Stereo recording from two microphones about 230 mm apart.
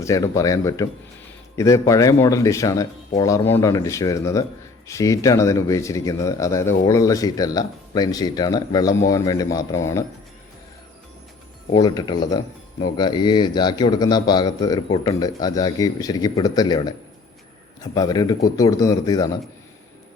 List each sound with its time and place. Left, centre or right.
0.0 s speech: centre
11.7 s speech: centre